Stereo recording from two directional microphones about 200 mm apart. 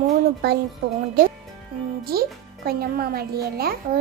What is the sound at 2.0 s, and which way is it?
A child's voice, 50° right (ahead or behind).